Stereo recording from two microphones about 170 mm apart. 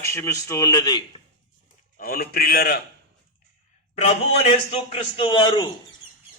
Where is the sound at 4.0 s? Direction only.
40° left (ahead or behind).